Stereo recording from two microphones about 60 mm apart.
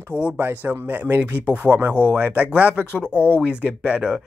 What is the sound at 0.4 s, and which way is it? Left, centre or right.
Speech, right.